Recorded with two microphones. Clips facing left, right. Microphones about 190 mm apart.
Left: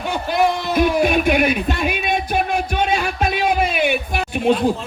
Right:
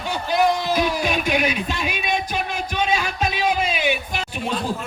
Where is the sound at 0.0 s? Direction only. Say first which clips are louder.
Left 2 dB; 55° left (ahead or behind).